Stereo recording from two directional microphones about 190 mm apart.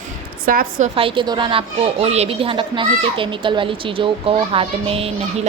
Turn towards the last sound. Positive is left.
turn(degrees=-30)  # may be behind; listen again after turning